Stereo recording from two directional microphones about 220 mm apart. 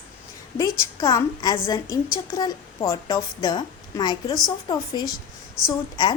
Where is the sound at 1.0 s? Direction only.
15° left (ahead or behind).